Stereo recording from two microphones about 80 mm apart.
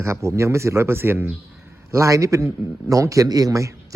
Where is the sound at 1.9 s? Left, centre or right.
Right.